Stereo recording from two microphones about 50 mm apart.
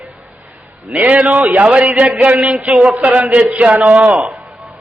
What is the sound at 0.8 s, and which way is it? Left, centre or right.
Speech, right.